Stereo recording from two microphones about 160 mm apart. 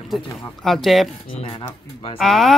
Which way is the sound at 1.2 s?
35° left (ahead or behind).